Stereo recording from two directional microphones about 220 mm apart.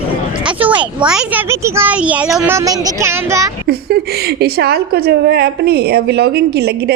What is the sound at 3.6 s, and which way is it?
A woman's voice, 45° right (ahead or behind).